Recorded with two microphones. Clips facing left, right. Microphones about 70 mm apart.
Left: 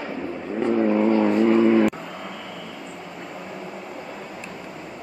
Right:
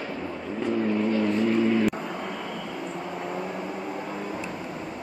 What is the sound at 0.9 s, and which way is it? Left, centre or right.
Vehicle, left.